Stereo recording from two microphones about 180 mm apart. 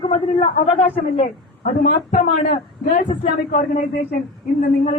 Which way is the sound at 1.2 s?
45° left (ahead or behind).